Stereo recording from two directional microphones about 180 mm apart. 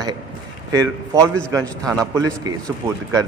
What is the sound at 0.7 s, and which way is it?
Speech, 20° right (ahead or behind).